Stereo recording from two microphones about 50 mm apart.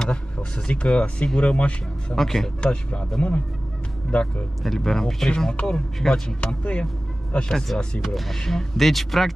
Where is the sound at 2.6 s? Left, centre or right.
Left.